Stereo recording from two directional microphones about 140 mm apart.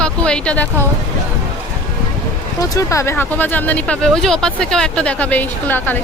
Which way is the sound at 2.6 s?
25° left (ahead or behind).